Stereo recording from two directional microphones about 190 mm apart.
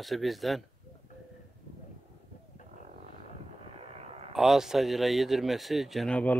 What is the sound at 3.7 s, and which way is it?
Vehicle, 30° right (ahead or behind).